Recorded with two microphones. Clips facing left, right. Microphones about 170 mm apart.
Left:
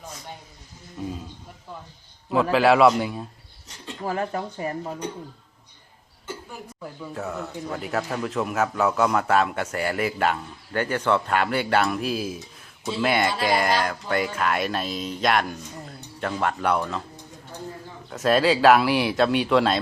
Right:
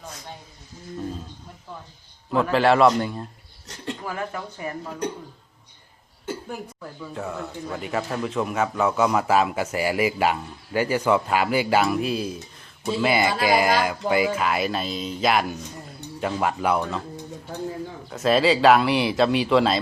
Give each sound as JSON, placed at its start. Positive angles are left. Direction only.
{"t": 2.3, "sound": "speech", "side_deg": 0}
{"t": 4.0, "sound": "speech", "side_deg": 35}
{"t": 6.8, "sound": "speech", "side_deg": 5}
{"t": 18.1, "sound": "speech", "side_deg": 0}